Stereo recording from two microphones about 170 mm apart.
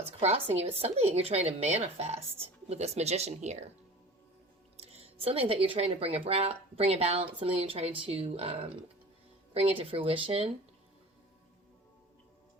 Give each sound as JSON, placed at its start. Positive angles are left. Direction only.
{"t": 0.2, "sound": "speech", "side_deg": -35}
{"t": 4.8, "sound": "speech", "side_deg": -35}